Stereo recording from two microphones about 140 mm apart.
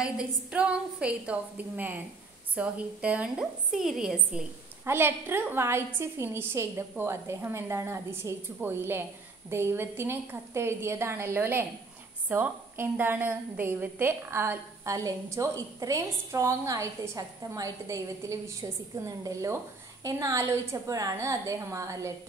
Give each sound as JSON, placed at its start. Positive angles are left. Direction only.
{"t": 0.0, "sound": "a woman's voice", "side_deg": -5}
{"t": 4.8, "sound": "a woman's voice", "side_deg": -15}